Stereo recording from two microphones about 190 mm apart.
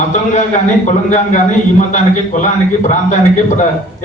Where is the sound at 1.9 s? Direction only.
40° left (ahead or behind).